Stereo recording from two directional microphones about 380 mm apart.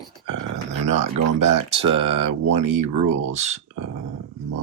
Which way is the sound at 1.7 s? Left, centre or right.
Centre.